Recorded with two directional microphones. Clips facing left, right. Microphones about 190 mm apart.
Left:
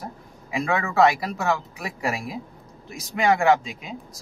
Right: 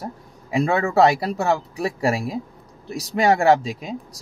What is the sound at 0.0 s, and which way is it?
Speech, 35° right (ahead or behind).